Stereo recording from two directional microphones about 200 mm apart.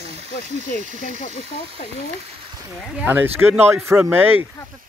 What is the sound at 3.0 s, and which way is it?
Speech, 10° right (ahead or behind).